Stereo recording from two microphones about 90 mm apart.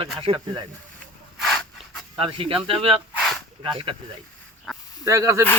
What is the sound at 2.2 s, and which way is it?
Speech, 80° right.